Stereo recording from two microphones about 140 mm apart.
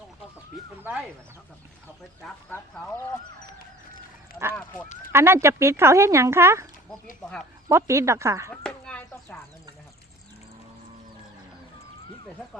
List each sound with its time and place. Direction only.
4.5 s speech: 15° left (ahead or behind)
5.1 s speech: 20° right (ahead or behind)
7.7 s speech: 20° right (ahead or behind)
8.6 s a sound: 5° left (ahead or behind)